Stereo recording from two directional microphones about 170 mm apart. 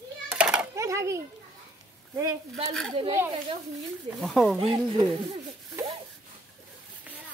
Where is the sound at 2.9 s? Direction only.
30° right (ahead or behind).